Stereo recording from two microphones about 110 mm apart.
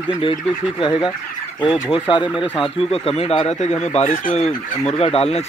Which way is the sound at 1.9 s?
45° left (ahead or behind).